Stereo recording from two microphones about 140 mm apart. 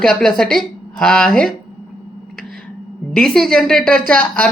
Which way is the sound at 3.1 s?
Centre (ahead or behind).